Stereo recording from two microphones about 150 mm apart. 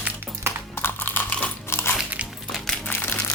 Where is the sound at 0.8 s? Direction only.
15° left (ahead or behind).